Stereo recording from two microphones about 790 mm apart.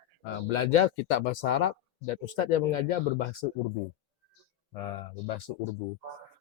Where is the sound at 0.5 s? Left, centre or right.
Left.